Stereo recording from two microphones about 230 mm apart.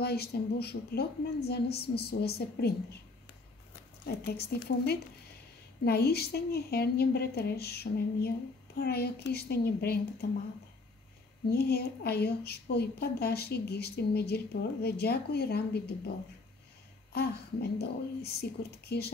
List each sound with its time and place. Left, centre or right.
0.0 s a woman's voice: left
4.0 s a woman's voice: left
11.5 s a woman's voice: left
17.1 s a woman's voice: left